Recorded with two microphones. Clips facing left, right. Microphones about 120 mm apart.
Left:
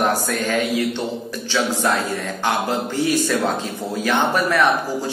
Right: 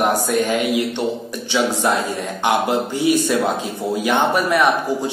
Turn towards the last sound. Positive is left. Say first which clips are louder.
# right 2 dB
turn(degrees=-15)  # may be behind; listen again after turning